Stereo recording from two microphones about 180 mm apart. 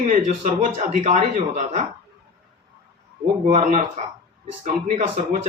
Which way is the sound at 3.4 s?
35° right (ahead or behind).